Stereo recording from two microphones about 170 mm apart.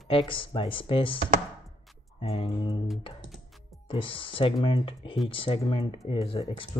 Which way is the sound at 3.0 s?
30° left (ahead or behind).